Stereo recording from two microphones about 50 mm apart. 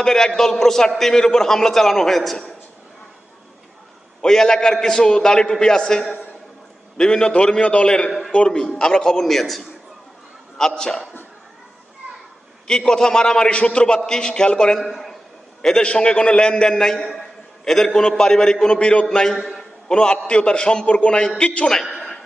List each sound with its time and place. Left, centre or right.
0.0 s a man's voice: centre
4.2 s a man's voice: centre
9.2 s a man's voice: centre
10.6 s a man's voice: centre
12.6 s a man's voice: centre
14.8 s a man's voice: centre
15.8 s a man's voice: left
21.8 s a sound: centre